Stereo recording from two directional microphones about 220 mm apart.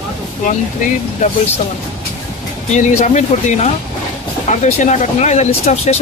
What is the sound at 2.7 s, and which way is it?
Speech, 30° left (ahead or behind).